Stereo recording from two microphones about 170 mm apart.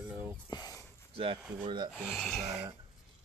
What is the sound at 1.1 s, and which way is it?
Speech, 35° right (ahead or behind).